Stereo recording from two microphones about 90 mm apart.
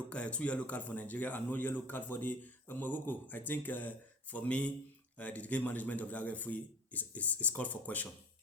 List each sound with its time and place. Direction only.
0.1 s a man's voice: 15° left (ahead or behind)